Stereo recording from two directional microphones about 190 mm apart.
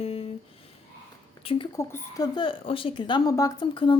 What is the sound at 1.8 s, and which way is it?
A woman's voice, 15° left (ahead or behind).